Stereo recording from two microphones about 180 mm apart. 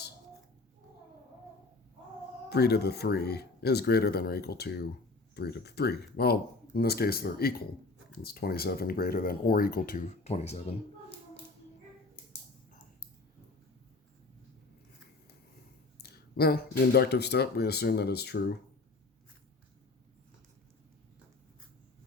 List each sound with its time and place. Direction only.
2.5 s speech: 65° left (ahead or behind)
10.2 s speech: 35° left (ahead or behind)
16.0 s speech: 60° left (ahead or behind)